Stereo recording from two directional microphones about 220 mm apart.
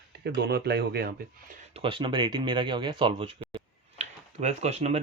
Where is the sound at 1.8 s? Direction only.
25° right (ahead or behind).